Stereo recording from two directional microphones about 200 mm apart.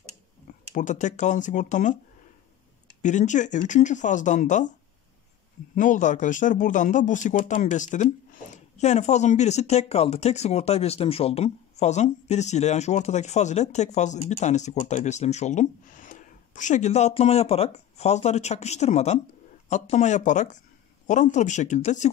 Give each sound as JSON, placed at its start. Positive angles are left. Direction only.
{"t": 0.5, "sound": "speech", "side_deg": 40}
{"t": 3.0, "sound": "speech", "side_deg": 35}
{"t": 5.8, "sound": "speech", "side_deg": 40}